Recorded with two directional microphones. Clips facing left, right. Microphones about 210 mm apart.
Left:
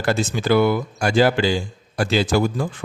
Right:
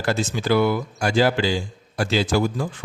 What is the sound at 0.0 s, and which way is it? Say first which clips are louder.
Speech: left 2 dB; 55° left (ahead or behind).